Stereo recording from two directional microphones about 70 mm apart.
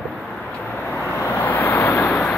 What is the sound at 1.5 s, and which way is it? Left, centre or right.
Vehicle, left.